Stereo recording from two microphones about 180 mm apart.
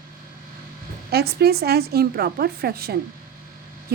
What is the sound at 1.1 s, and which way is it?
A woman's voice, 60° right (ahead or behind).